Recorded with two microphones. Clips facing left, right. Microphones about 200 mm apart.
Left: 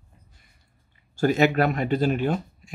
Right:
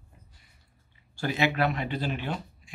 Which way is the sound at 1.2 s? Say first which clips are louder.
Left 7 dB; 45° left (ahead or behind).